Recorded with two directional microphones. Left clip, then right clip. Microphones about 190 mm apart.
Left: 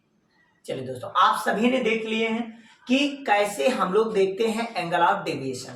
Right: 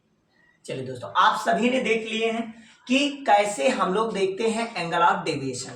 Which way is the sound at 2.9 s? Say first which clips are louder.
Right 2 dB; 20° left (ahead or behind).